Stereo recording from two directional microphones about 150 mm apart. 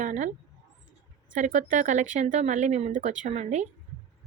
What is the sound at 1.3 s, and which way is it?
Speech, 55° right (ahead or behind).